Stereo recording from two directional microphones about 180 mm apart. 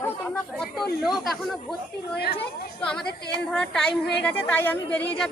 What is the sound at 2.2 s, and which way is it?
Speech, 60° left (ahead or behind).